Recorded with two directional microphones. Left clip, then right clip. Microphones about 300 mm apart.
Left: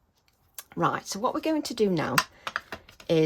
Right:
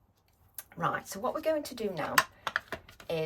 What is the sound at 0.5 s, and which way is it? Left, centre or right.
Speech, centre.